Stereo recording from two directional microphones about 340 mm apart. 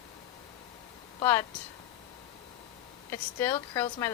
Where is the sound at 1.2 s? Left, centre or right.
Centre.